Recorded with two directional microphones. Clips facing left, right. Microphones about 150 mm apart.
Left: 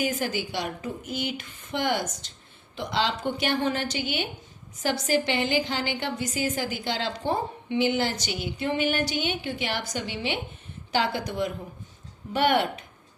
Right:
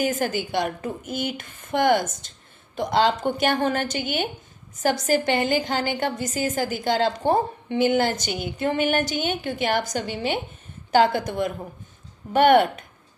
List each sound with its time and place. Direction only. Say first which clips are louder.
0.0 s a woman's voice: right 4 dB; 50° right (ahead or behind)